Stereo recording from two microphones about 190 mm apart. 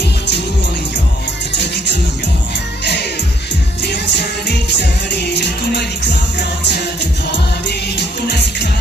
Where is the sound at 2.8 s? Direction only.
65° left (ahead or behind).